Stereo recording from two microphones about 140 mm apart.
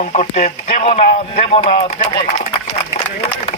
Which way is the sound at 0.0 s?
55° left (ahead or behind).